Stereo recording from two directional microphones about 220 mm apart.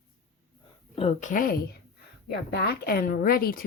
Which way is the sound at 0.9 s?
30° left (ahead or behind).